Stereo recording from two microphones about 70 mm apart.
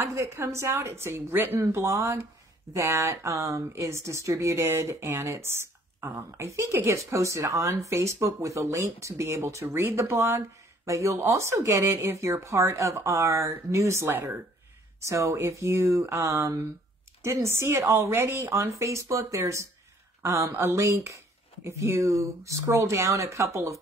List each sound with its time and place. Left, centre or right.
0.0 s a woman's voice: right
1.6 s a woman's voice: right
18.2 s a woman's voice: right
18.5 s a woman's voice: right